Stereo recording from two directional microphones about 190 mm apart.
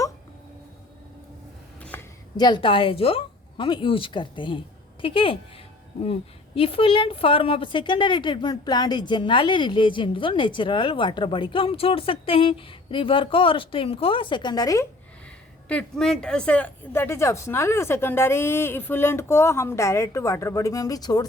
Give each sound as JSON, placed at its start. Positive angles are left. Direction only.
{"t": 1.8, "sound": "a sound", "side_deg": 10}
{"t": 2.3, "sound": "a woman's voice", "side_deg": 20}
{"t": 15.7, "sound": "speech", "side_deg": 5}